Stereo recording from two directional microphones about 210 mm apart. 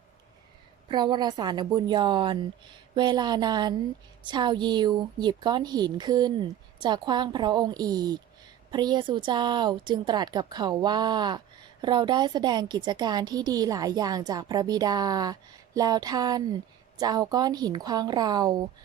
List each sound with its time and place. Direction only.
0.9 s a woman's voice: 20° right (ahead or behind)